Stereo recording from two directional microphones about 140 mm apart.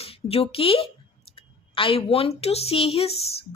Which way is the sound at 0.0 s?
45° left (ahead or behind).